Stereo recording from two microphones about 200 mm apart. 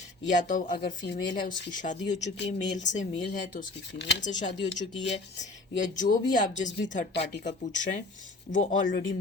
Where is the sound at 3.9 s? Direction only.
60° left (ahead or behind).